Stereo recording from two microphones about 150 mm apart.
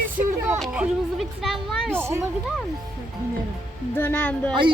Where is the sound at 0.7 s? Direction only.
5° right (ahead or behind).